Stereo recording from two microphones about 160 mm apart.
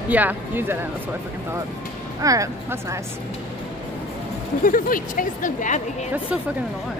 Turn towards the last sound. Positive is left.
turn(degrees=55)  # may be behind; listen again after turning